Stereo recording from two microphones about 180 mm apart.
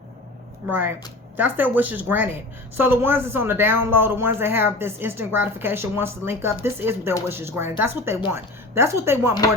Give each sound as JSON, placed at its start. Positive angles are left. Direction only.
{"t": 0.7, "sound": "speech", "side_deg": -10}